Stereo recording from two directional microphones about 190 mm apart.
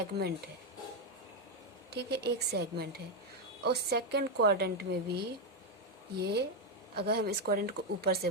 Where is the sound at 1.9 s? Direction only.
60° right (ahead or behind).